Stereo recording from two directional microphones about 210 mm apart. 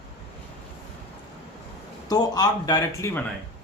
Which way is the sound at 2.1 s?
20° left (ahead or behind).